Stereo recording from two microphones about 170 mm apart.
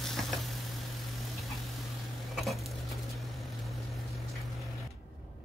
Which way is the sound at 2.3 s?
Centre (ahead or behind).